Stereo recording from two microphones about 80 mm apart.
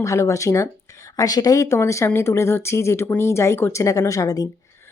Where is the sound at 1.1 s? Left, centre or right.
Left.